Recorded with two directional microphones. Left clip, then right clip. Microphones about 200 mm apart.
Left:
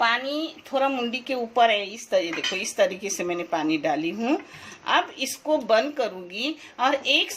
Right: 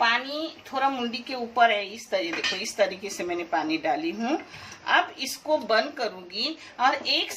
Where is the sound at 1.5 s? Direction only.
50° left (ahead or behind).